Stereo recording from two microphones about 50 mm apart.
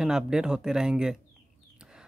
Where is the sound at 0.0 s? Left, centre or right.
Centre.